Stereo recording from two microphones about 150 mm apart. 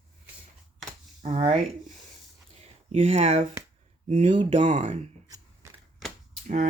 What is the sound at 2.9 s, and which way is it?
Speech, 45° right (ahead or behind).